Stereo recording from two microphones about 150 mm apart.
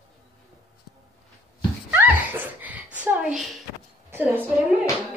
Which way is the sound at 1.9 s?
15° right (ahead or behind).